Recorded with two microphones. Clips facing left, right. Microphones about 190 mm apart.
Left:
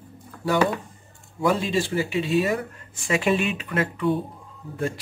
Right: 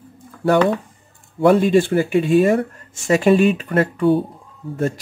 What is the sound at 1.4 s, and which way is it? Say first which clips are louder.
Speech: right 9 dB; 55° right (ahead or behind).